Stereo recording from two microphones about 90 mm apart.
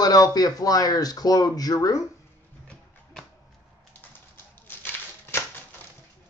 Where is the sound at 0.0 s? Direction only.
45° left (ahead or behind).